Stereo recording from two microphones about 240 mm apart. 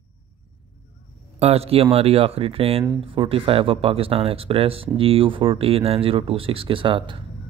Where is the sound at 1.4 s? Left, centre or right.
Right.